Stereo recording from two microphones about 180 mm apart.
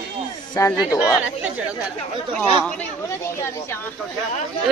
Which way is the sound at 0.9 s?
5° right (ahead or behind).